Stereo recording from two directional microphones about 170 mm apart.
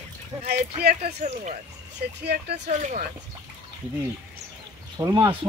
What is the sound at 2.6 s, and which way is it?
Speech, 45° right (ahead or behind).